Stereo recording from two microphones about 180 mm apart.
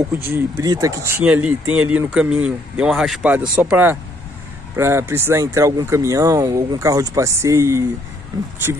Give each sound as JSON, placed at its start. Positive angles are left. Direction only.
{"t": 0.1, "sound": "speech", "side_deg": -15}